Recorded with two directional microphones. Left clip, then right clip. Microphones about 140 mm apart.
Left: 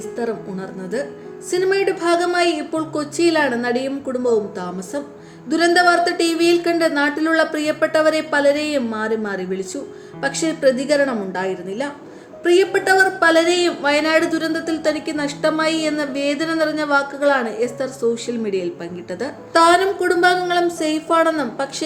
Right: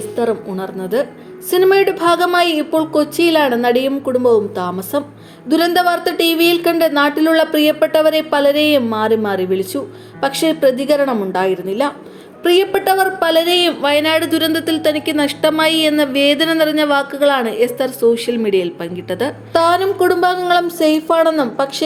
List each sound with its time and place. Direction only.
0.2 s a woman's voice: 10° right (ahead or behind)
19.5 s a woman's voice: 5° right (ahead or behind)